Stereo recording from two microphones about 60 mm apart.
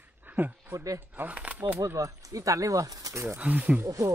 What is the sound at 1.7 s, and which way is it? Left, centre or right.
Speech, right.